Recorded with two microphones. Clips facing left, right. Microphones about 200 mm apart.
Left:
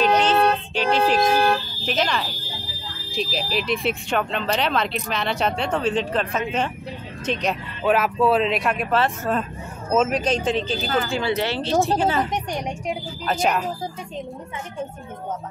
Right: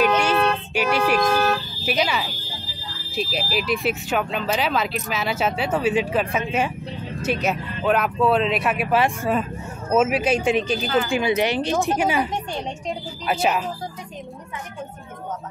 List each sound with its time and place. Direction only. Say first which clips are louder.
0.2 s a sound: left 2 dB; 10° right (ahead or behind)
1.2 s vehicle: left 1 dB; 25° left (ahead or behind)
1.9 s speech: right 1 dB; 10° right (ahead or behind)
13.3 s speech: even; 5° right (ahead or behind)